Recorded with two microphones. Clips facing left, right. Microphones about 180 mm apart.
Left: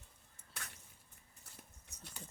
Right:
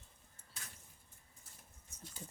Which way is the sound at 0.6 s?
65° left (ahead or behind).